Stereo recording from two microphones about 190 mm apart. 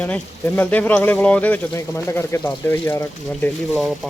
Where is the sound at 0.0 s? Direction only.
10° left (ahead or behind).